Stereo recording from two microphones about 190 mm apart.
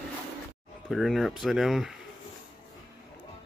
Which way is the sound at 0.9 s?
Centre (ahead or behind).